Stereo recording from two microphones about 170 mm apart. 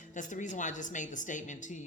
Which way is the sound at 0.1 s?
50° left (ahead or behind).